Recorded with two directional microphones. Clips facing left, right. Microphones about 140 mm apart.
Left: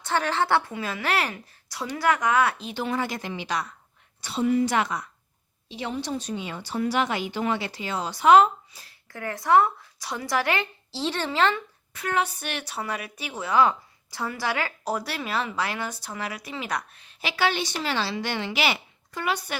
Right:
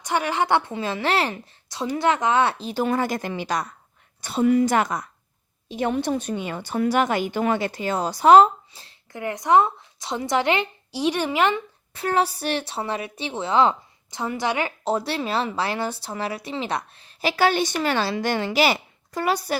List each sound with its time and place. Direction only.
0.0 s a woman's voice: 15° right (ahead or behind)
11.9 s a woman's voice: 35° right (ahead or behind)